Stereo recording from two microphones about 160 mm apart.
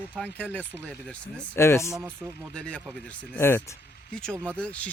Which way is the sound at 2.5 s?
5° left (ahead or behind).